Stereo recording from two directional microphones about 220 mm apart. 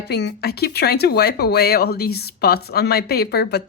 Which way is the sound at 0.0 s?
50° left (ahead or behind).